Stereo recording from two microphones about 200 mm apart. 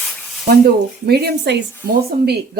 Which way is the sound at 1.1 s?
55° right (ahead or behind).